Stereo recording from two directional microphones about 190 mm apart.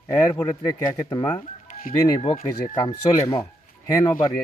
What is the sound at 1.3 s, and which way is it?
Music, 45° left (ahead or behind).